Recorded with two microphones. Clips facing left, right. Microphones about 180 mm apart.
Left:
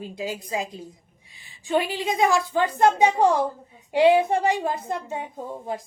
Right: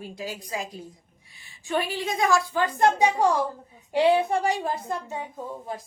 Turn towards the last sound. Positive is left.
turn(degrees=20)  # may be behind; listen again after turning